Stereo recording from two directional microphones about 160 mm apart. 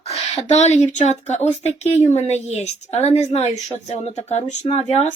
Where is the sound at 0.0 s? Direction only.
40° left (ahead or behind).